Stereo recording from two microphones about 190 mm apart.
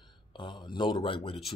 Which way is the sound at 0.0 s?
25° left (ahead or behind).